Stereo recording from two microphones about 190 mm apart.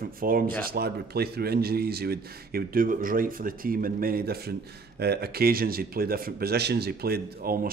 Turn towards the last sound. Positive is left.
turn(degrees=-50)  # may be behind; listen again after turning